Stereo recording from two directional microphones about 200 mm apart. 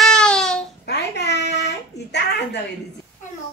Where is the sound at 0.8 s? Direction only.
55° left (ahead or behind).